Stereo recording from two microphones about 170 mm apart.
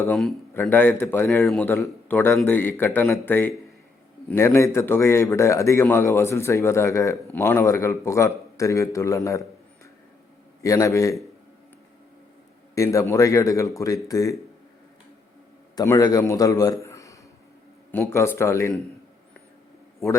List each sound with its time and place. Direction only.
0.1 s a man's voice: centre (ahead or behind)
0.5 s a man's voice: 10° left (ahead or behind)
10.6 s a man's voice: 20° left (ahead or behind)
12.7 s a man's voice: 20° left (ahead or behind)
15.7 s a man's voice: 20° left (ahead or behind)
16.8 s a sound: 20° left (ahead or behind)
17.9 s a man's voice: 15° left (ahead or behind)